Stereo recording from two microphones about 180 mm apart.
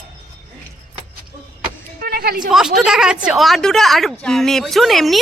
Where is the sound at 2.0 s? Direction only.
55° right (ahead or behind).